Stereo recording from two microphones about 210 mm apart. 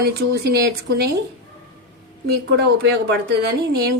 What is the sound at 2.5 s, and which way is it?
Speech, 55° right (ahead or behind).